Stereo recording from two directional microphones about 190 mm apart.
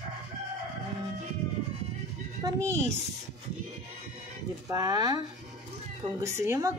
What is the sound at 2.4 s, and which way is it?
Speech, 15° right (ahead or behind).